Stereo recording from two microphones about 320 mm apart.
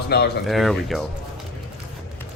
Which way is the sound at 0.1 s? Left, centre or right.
Left.